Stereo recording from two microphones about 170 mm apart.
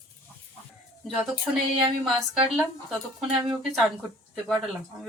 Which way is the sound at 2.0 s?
Centre (ahead or behind).